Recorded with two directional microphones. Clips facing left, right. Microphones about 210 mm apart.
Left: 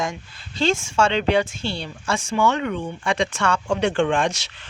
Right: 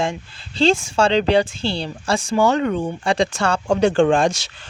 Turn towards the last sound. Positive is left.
turn(degrees=-35)  # may be behind; listen again after turning